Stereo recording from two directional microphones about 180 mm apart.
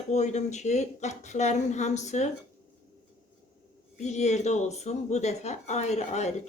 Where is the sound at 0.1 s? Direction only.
40° left (ahead or behind).